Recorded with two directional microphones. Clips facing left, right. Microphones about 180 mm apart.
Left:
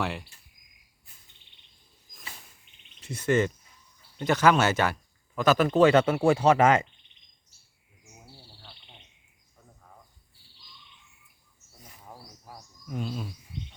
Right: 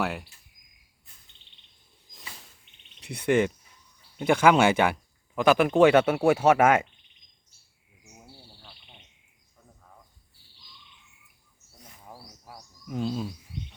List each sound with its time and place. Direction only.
0.0 s speech: centre (ahead or behind)
3.2 s speech: 15° right (ahead or behind)
11.8 s bird: 5° right (ahead or behind)
12.9 s bird: 30° right (ahead or behind)